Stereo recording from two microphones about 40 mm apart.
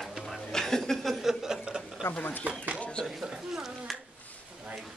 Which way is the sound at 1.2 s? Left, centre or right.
Centre.